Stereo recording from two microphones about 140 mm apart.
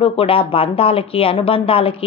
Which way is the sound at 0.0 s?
45° left (ahead or behind).